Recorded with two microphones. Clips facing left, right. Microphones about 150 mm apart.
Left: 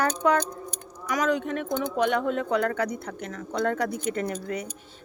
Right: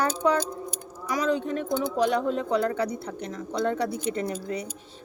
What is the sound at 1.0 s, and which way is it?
Speech, 30° right (ahead or behind).